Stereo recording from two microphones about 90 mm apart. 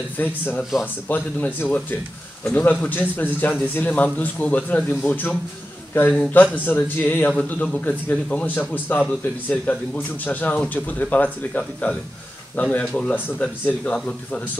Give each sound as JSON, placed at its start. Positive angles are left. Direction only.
{"t": 0.2, "sound": "a man's voice", "side_deg": 20}